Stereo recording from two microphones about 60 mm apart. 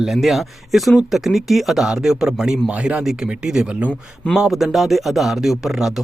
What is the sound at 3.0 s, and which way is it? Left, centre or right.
Speech, centre.